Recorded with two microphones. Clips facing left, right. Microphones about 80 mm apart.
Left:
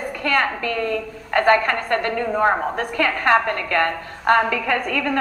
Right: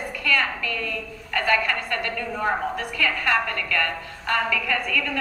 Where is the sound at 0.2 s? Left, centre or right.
Left.